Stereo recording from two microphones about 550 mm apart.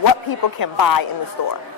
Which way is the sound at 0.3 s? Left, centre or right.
Left.